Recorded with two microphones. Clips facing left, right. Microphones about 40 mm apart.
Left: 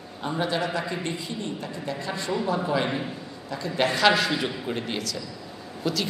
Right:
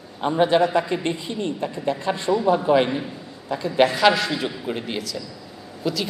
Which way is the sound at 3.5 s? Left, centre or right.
Right.